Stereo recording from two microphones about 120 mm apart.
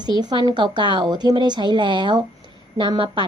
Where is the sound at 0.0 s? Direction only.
35° right (ahead or behind).